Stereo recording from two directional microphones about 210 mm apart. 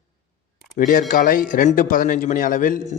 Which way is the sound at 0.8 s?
40° left (ahead or behind).